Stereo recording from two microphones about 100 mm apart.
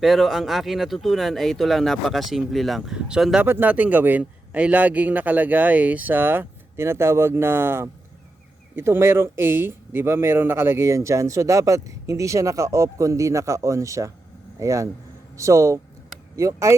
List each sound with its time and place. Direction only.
0.0 s speech: centre (ahead or behind)
3.4 s speech: 20° right (ahead or behind)